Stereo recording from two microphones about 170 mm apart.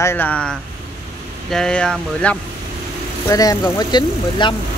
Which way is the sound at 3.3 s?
20° left (ahead or behind).